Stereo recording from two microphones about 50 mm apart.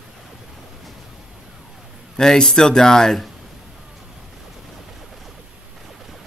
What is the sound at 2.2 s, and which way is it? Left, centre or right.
A man's voice, centre.